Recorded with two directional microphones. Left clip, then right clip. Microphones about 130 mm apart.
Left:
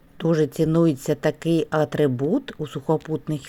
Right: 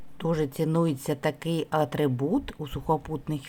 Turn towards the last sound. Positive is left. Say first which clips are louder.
# left 6 dB
turn(degrees=15)  # may be behind; listen again after turning